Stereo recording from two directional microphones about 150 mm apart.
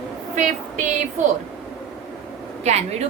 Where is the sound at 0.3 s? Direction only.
55° right (ahead or behind).